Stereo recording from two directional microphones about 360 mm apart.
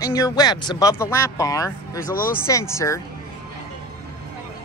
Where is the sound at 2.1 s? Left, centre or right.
Left.